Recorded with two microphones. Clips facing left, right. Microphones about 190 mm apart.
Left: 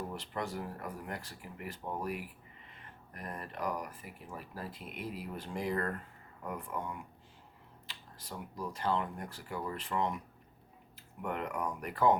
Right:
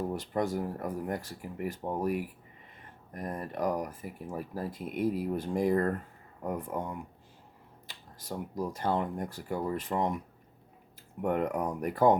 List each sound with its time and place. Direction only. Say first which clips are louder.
0.1 s speech: right 8 dB; 45° right (ahead or behind)
3.2 s speech: right 7 dB; 20° right (ahead or behind)
3.5 s speech: right 6 dB; 45° right (ahead or behind)
11.2 s speech: right 7 dB; 45° right (ahead or behind)